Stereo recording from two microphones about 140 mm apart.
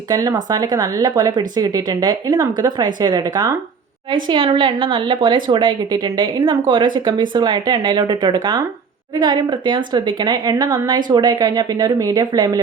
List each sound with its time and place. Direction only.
0.1 s a woman's voice: 25° right (ahead or behind)